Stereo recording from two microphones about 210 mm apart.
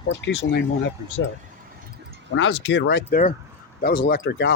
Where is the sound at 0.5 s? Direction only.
55° left (ahead or behind).